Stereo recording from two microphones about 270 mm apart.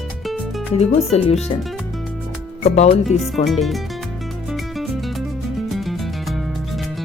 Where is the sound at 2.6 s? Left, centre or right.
Left.